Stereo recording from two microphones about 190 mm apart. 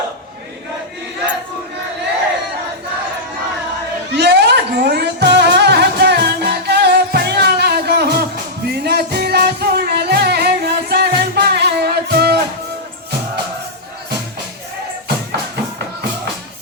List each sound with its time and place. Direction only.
4.1 s music: 60° right (ahead or behind)